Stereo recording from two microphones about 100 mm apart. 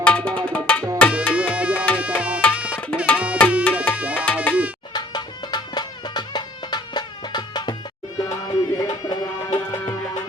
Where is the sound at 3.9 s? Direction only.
15° right (ahead or behind).